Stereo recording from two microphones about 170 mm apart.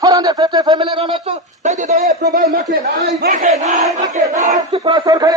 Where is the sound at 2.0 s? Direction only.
65° right (ahead or behind).